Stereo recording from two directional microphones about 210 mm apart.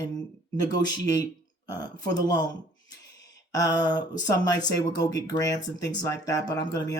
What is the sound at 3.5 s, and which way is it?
Speech, 15° left (ahead or behind).